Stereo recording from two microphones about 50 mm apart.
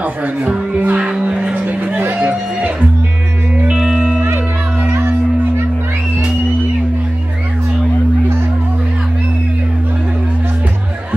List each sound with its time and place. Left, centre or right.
0.0 s speech: right
1.0 s music: centre; by 2.7 s right
3.6 s music: centre